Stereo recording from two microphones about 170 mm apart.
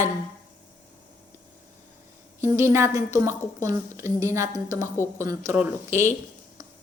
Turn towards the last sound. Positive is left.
turn(degrees=-15)  # may be behind; listen again after turning